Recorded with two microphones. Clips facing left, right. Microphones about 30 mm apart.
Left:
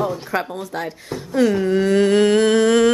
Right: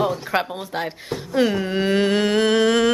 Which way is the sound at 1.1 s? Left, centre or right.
Centre.